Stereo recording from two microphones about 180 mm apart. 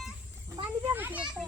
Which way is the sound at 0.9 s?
10° right (ahead or behind).